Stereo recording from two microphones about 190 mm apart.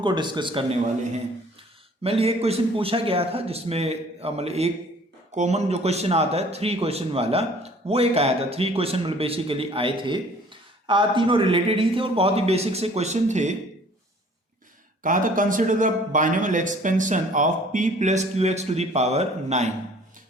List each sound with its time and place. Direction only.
0.0 s speech: 25° right (ahead or behind)
2.0 s speech: 30° right (ahead or behind)
15.0 s speech: 45° right (ahead or behind)